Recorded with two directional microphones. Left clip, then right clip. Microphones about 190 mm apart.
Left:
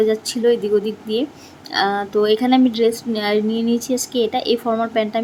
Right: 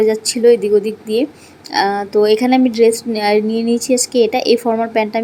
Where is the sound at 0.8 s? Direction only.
40° right (ahead or behind).